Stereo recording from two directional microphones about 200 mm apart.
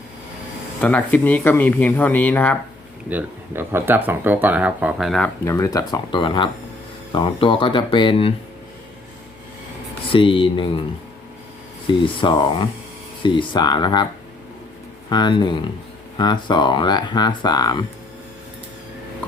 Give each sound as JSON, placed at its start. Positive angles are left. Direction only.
{"t": 0.8, "sound": "speech", "side_deg": 5}
{"t": 3.1, "sound": "speech", "side_deg": -10}
{"t": 5.5, "sound": "speech", "side_deg": 15}
{"t": 10.1, "sound": "speech", "side_deg": 25}
{"t": 11.9, "sound": "speech", "side_deg": 25}
{"t": 15.1, "sound": "speech", "side_deg": 20}